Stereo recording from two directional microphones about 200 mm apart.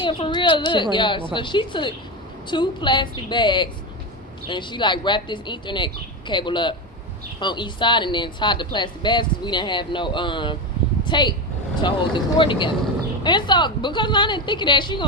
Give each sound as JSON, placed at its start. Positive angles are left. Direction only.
{"t": 0.0, "sound": "a woman's voice", "side_deg": 25}